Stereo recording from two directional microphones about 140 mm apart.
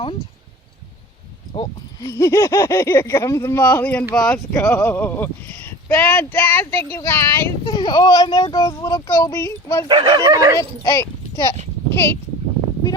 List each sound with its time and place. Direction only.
2.0 s speech: 20° left (ahead or behind)
7.7 s speech: 30° left (ahead or behind)
9.9 s speech: 30° right (ahead or behind)
10.6 s speech: 20° left (ahead or behind)